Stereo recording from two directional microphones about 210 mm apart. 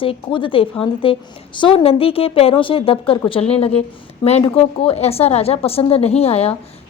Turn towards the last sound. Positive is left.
turn(degrees=30)  # may be behind; listen again after turning